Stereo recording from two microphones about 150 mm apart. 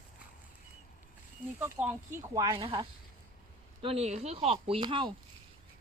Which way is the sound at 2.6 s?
35° right (ahead or behind).